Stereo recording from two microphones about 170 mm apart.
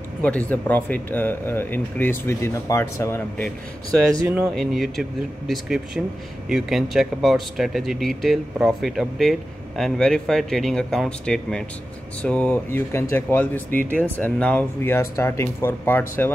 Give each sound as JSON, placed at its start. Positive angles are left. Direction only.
{"t": 0.2, "sound": "speech", "side_deg": 10}
{"t": 4.1, "sound": "speech", "side_deg": -15}
{"t": 4.6, "sound": "speech", "side_deg": 0}